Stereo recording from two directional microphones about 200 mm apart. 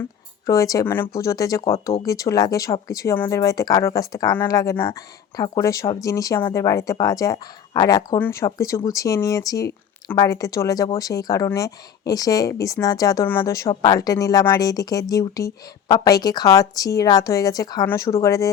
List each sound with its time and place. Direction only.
0.0 s speech: 15° left (ahead or behind)